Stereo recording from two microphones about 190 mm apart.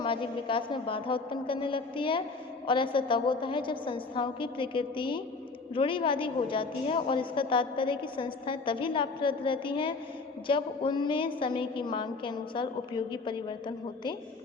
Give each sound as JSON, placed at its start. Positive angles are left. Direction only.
{"t": 0.0, "sound": "a woman's voice", "side_deg": 25}